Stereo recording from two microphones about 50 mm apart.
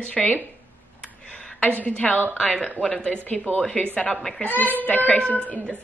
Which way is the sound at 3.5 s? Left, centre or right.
Left.